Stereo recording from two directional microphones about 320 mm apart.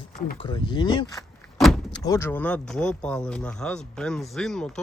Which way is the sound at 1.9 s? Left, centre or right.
Centre.